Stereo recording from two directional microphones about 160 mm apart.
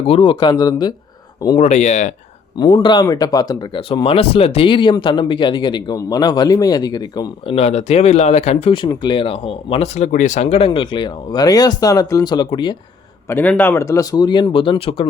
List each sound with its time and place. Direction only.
0.1 s speech: 30° left (ahead or behind)
1.5 s speech: 45° left (ahead or behind)
2.6 s speech: 25° left (ahead or behind)
3.8 s speech: 35° left (ahead or behind)
7.5 s speech: 40° left (ahead or behind)
8.6 s speech: 30° left (ahead or behind)
13.2 s speech: 10° left (ahead or behind); by 15.0 s 35° left (ahead or behind)